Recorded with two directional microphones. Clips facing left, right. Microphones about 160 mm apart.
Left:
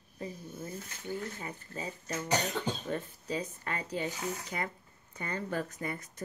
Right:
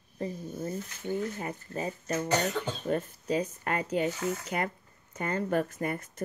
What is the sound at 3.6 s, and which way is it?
Speech, 55° right (ahead or behind).